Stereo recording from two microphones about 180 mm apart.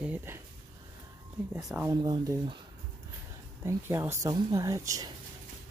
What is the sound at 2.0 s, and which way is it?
Speech, 25° right (ahead or behind).